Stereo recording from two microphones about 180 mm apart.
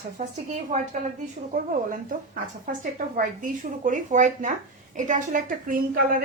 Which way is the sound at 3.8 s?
45° right (ahead or behind).